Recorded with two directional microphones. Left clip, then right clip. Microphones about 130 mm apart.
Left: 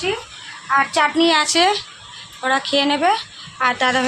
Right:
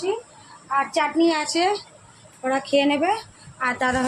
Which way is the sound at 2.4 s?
10° right (ahead or behind).